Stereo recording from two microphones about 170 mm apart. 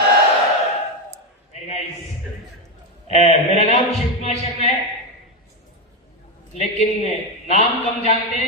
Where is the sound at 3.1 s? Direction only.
40° left (ahead or behind).